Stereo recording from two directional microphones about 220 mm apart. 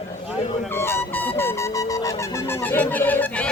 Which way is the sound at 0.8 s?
10° left (ahead or behind).